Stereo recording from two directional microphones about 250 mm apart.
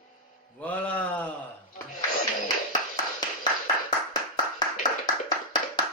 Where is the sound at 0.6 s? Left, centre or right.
Centre.